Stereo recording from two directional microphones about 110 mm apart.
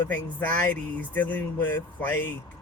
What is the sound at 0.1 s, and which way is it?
Speech, 15° left (ahead or behind).